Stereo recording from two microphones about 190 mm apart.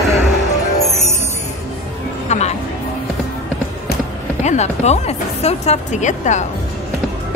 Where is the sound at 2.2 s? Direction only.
35° left (ahead or behind).